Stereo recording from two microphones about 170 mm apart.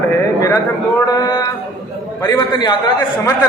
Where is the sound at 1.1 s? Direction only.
20° left (ahead or behind).